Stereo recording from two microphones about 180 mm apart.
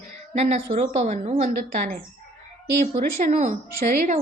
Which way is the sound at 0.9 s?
40° right (ahead or behind).